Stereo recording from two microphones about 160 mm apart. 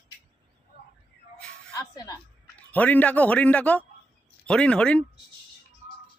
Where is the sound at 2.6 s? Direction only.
10° left (ahead or behind).